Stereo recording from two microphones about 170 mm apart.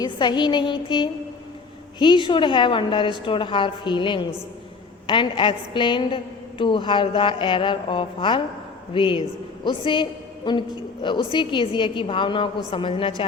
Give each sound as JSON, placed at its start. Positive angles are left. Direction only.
{"t": 0.0, "sound": "a woman's voice", "side_deg": 25}